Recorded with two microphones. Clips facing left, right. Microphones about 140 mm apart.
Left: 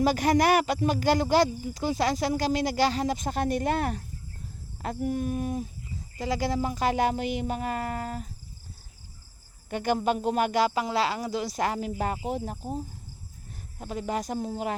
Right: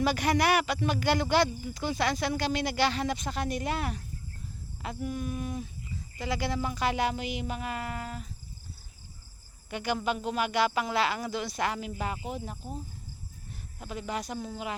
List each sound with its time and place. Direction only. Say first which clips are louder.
0.0 s speech: left 4 dB; 40° left (ahead or behind)
9.6 s speech: left 5 dB; 45° left (ahead or behind)
13.7 s speech: left 4 dB; 35° left (ahead or behind)